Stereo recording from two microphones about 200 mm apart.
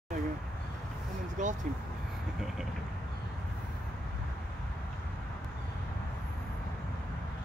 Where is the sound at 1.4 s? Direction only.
40° right (ahead or behind).